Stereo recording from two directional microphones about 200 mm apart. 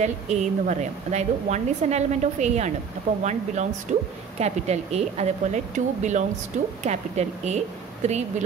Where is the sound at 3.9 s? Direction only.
35° right (ahead or behind).